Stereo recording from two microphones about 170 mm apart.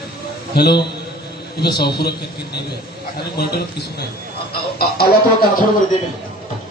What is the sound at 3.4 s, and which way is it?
Speech, 70° left (ahead or behind).